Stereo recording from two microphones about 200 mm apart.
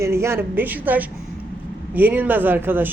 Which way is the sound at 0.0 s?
15° right (ahead or behind).